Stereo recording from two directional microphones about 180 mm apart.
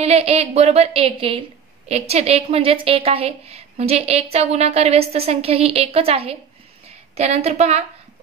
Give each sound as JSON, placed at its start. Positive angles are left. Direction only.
{"t": 0.0, "sound": "a woman's voice", "side_deg": -35}